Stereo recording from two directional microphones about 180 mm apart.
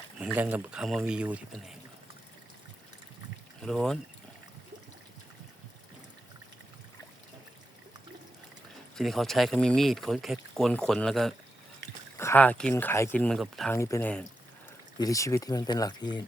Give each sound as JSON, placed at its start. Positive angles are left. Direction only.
{"t": 0.3, "sound": "speech", "side_deg": -10}
{"t": 3.7, "sound": "speech", "side_deg": 0}
{"t": 9.0, "sound": "speech", "side_deg": 0}
{"t": 12.1, "sound": "speech", "side_deg": 15}
{"t": 13.7, "sound": "speech", "side_deg": 15}